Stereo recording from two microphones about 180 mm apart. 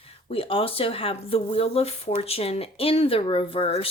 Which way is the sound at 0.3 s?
30° left (ahead or behind).